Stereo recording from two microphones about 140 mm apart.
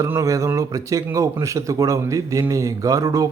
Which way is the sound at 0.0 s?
20° right (ahead or behind).